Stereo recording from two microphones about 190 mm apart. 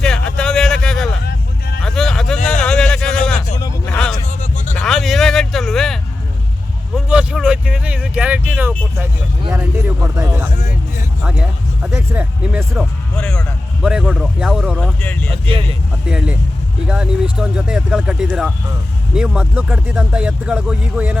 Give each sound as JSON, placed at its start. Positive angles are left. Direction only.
{"t": 0.0, "sound": "a sound", "side_deg": 5}
{"t": 1.8, "sound": "vehicle", "side_deg": 0}
{"t": 2.6, "sound": "a sound", "side_deg": 5}
{"t": 4.3, "sound": "music", "side_deg": 40}
{"t": 4.7, "sound": "vehicle", "side_deg": 0}
{"t": 9.5, "sound": "speech", "side_deg": -10}
{"t": 13.1, "sound": "speech", "side_deg": 5}
{"t": 15.3, "sound": "speech", "side_deg": -30}
{"t": 16.0, "sound": "speech", "side_deg": -5}